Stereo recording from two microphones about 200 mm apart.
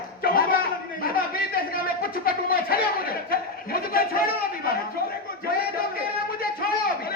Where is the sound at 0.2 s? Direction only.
50° left (ahead or behind).